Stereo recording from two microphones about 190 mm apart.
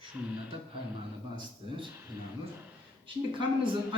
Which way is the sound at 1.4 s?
25° right (ahead or behind).